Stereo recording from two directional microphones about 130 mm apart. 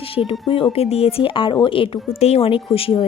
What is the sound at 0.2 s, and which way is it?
A woman's voice, 45° left (ahead or behind).